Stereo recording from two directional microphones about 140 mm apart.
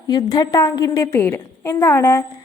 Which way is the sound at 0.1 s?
30° left (ahead or behind).